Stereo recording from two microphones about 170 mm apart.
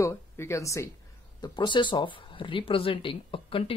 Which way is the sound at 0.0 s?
15° left (ahead or behind).